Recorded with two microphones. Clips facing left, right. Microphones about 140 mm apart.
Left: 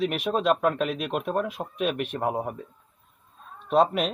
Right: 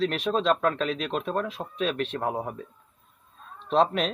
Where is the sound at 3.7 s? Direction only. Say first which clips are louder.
Left 1 dB; 5° left (ahead or behind).